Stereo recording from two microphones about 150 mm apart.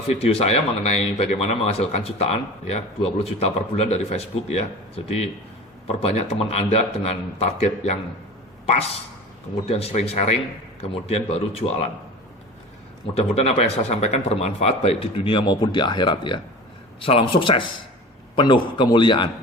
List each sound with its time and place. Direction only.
0.1 s speech: 40° left (ahead or behind)
6.0 s speech: 45° left (ahead or behind)
9.6 s speech: 40° left (ahead or behind)
13.1 s speech: 45° left (ahead or behind)